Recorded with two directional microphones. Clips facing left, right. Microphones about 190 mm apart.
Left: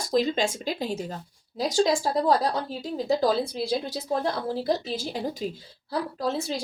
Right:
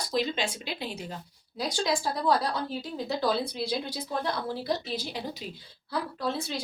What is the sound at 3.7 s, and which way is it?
A woman's voice, 45° left (ahead or behind).